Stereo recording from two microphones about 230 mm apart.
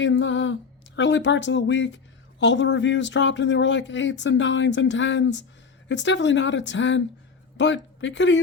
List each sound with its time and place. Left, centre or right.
0.0 s speech: left